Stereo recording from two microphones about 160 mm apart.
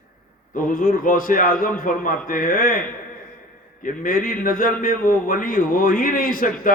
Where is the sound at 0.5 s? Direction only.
60° left (ahead or behind).